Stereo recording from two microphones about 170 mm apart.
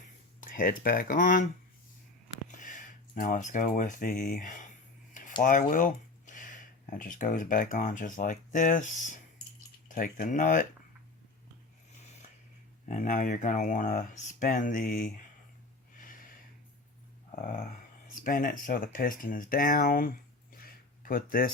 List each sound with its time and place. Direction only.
0.3 s speech: 55° left (ahead or behind)
2.5 s speech: 50° left (ahead or behind)
12.9 s speech: 50° left (ahead or behind)
17.4 s speech: 55° left (ahead or behind)
20.6 s a sound: 60° left (ahead or behind)